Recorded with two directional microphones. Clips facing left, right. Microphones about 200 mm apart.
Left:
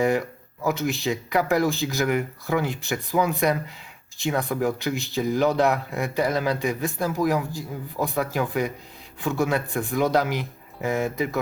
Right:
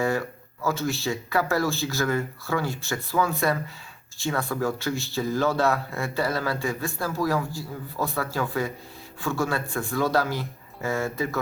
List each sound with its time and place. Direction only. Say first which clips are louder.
0.0 s speech: left 3 dB; 20° left (ahead or behind)